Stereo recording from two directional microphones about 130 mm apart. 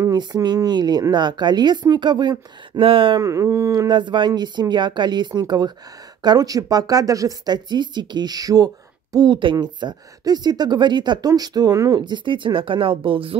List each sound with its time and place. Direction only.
0.1 s speech: 35° right (ahead or behind)
3.2 s speech: 25° right (ahead or behind); by 13.4 s 45° right (ahead or behind)